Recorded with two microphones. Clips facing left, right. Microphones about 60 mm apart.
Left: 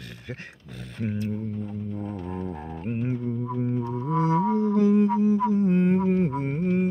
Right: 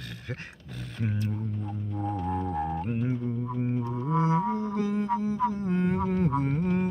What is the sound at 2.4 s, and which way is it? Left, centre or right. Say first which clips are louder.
Music: right 5 dB; right.